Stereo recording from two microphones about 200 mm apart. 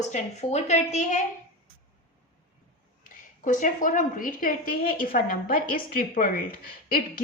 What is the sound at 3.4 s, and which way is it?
A woman's voice, 40° left (ahead or behind).